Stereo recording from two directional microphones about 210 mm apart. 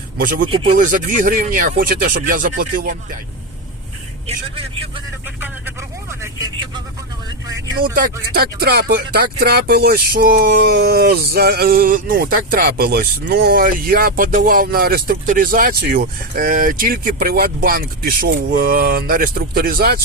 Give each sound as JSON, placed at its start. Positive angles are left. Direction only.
{"t": 0.2, "sound": "speech", "side_deg": -40}
{"t": 0.4, "sound": "speech", "side_deg": -25}
{"t": 0.8, "sound": "speech", "side_deg": -40}
{"t": 4.3, "sound": "speech", "side_deg": -30}
{"t": 5.4, "sound": "speech", "side_deg": -10}
{"t": 7.9, "sound": "music", "side_deg": -45}